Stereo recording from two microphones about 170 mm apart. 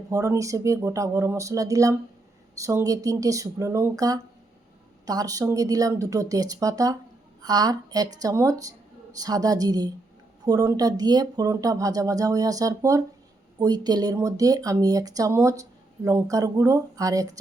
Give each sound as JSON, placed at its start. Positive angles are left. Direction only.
{"t": 0.1, "sound": "speech", "side_deg": -20}